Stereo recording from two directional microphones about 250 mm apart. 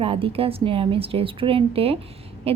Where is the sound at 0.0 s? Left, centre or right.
Right.